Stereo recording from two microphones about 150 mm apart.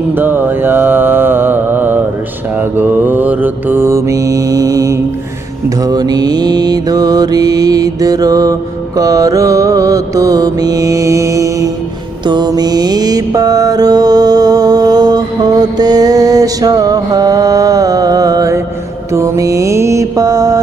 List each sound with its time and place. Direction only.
0.1 s mantra: 15° right (ahead or behind)